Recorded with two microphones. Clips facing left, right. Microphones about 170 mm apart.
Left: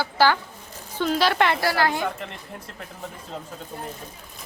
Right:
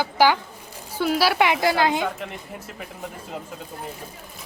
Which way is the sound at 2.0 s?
5° right (ahead or behind).